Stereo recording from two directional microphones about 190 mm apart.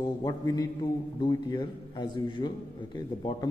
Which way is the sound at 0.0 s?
20° left (ahead or behind).